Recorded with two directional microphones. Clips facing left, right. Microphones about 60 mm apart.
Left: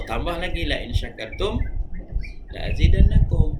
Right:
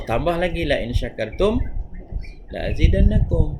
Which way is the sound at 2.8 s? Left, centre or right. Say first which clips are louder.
Right 3 dB; right.